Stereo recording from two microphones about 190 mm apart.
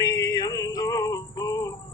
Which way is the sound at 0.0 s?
20° left (ahead or behind).